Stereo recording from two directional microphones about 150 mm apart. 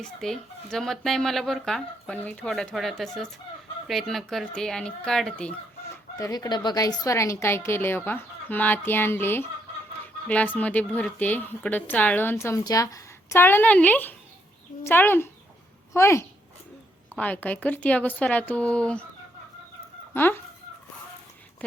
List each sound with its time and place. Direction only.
0.2 s speech: centre (ahead or behind)
6.1 s a woman's voice: 25° left (ahead or behind); by 19.0 s 5° left (ahead or behind)
20.1 s a woman's voice: 15° left (ahead or behind)